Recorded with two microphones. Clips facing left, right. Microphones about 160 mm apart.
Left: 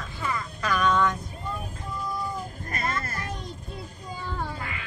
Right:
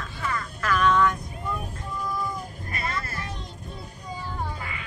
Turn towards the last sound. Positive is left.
turn(degrees=45)  # may be behind; listen again after turning